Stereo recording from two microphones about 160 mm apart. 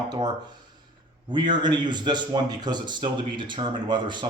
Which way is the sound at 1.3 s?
30° right (ahead or behind).